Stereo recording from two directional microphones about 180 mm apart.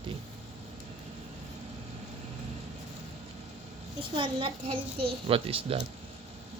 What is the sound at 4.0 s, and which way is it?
A child's voice, 25° right (ahead or behind).